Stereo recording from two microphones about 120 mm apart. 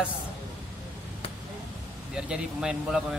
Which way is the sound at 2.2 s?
5° right (ahead or behind).